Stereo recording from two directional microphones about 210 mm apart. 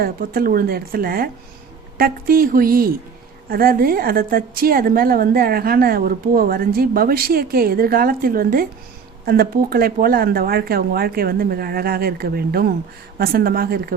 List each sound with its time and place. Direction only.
0.0 s a woman's voice: 45° right (ahead or behind)